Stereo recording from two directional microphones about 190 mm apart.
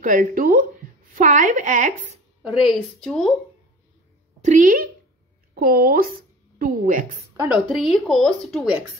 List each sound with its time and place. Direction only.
0.0 s a woman's voice: 45° right (ahead or behind)
2.6 s speech: centre (ahead or behind)
4.4 s a woman's voice: 40° right (ahead or behind)
7.4 s speech: centre (ahead or behind)